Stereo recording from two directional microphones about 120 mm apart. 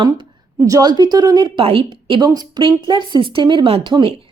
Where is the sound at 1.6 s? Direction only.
50° right (ahead or behind).